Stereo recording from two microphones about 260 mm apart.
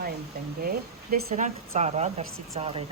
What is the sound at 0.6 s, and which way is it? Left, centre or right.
Speech, right.